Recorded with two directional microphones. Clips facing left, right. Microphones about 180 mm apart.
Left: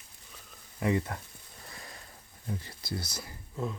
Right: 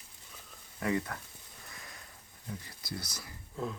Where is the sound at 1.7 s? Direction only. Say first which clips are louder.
Left 4 dB; 35° left (ahead or behind).